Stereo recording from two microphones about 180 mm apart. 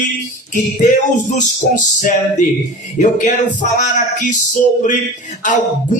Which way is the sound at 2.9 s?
45° left (ahead or behind).